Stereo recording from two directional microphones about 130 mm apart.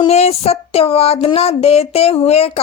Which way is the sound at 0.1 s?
55° left (ahead or behind).